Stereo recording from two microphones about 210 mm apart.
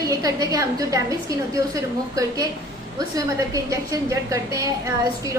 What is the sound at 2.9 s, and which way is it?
A woman's voice, 15° right (ahead or behind).